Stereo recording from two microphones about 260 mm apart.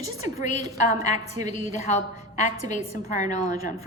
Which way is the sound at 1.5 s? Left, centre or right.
Left.